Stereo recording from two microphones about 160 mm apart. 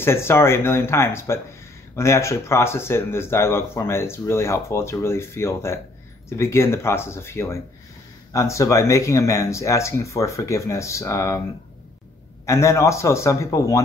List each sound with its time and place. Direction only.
0.0 s speech: 15° left (ahead or behind)
12.4 s speech: 20° left (ahead or behind)